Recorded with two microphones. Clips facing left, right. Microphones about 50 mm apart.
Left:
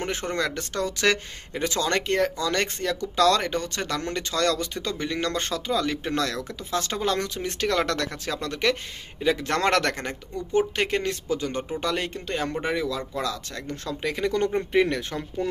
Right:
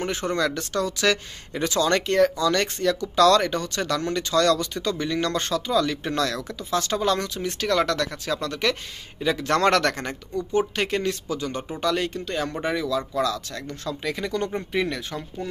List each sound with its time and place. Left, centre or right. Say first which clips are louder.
0.2 s speech: right 3 dB; left
8.4 s speech: left 3 dB; left